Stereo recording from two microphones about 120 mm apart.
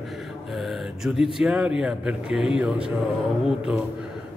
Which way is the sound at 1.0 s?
5° right (ahead or behind).